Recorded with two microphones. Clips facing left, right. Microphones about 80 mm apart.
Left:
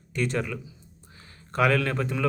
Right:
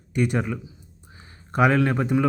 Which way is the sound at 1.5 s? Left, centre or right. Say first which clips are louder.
Right 4 dB; centre.